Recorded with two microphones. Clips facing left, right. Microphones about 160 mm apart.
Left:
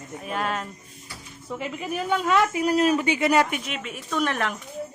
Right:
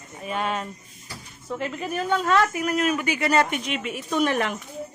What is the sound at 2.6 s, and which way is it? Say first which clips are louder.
Speech: left 3 dB; 30° left (ahead or behind).